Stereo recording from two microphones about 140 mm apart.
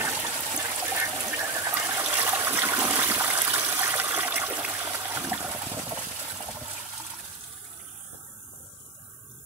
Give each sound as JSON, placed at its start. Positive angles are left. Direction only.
{"t": 0.0, "sound": "water", "side_deg": -20}